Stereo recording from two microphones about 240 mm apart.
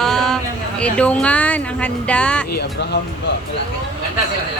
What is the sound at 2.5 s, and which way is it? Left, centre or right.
Speech, left.